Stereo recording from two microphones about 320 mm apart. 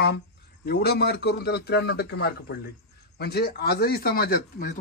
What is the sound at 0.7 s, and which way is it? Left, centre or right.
A man's voice, left.